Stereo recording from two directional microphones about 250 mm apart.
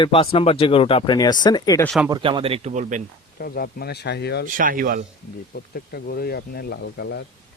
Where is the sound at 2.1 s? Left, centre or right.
Centre.